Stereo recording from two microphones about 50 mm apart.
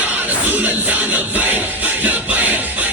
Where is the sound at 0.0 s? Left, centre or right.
Right.